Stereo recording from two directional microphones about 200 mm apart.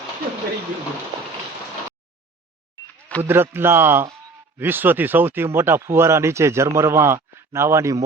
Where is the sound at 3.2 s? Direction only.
10° right (ahead or behind).